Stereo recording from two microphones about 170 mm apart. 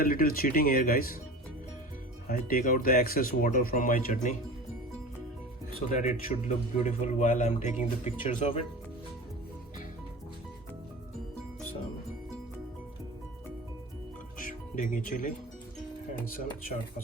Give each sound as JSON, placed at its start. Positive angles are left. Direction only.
{"t": 0.0, "sound": "speech", "side_deg": 60}
{"t": 2.2, "sound": "speech", "side_deg": 60}
{"t": 5.9, "sound": "speech", "side_deg": 50}
{"t": 14.4, "sound": "music", "side_deg": 55}